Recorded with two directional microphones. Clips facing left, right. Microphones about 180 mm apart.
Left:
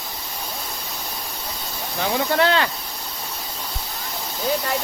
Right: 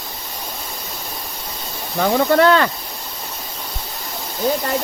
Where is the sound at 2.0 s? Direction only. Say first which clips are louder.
Right 6 dB; 45° right (ahead or behind).